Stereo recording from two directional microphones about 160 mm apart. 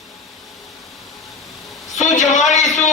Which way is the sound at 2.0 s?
50° left (ahead or behind).